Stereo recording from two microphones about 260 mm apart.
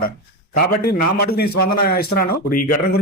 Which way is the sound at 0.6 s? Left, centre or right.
Left.